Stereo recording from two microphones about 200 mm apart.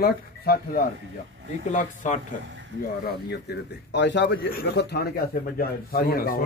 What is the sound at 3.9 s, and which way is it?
A man's voice, 60° left (ahead or behind).